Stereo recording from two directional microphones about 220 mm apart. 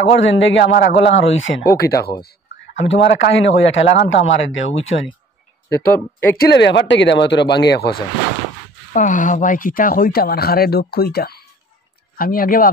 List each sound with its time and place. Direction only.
0.0 s speech: 55° left (ahead or behind)
2.2 s speech: 60° left (ahead or behind)
6.3 s speech: 50° left (ahead or behind)
8.9 s speech: 35° left (ahead or behind)